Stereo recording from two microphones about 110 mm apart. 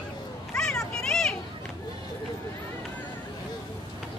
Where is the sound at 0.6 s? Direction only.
5° left (ahead or behind).